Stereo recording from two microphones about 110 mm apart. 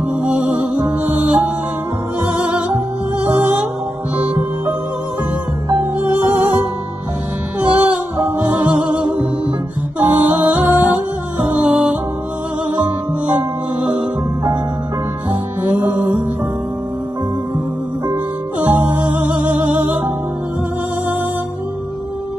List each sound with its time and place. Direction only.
1.0 s music: 20° right (ahead or behind)
2.4 s music: 10° right (ahead or behind)
5.9 s music: 15° right (ahead or behind)
10.0 s music: 15° right (ahead or behind)
15.6 s music: 15° right (ahead or behind)
18.7 s music: 15° right (ahead or behind)